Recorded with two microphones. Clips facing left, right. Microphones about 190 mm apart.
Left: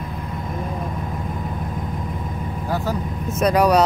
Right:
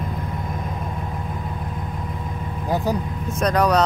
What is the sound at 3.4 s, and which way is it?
Speech, 10° left (ahead or behind).